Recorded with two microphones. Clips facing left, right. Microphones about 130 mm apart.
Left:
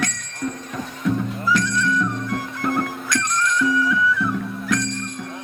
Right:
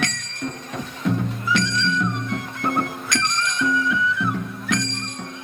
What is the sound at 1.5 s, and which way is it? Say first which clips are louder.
Music: left 2 dB; 25° right (ahead or behind).